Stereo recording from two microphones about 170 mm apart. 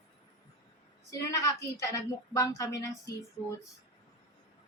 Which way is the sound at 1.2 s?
20° left (ahead or behind).